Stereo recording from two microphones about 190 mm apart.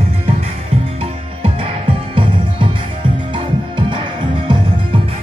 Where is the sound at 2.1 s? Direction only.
25° right (ahead or behind).